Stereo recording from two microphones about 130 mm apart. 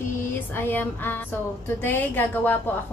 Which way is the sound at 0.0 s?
20° left (ahead or behind).